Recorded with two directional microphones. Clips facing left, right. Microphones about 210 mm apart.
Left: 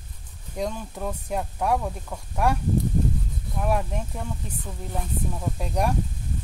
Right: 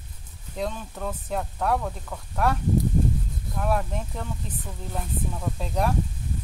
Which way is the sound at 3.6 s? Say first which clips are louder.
Left 1 dB; 10° left (ahead or behind).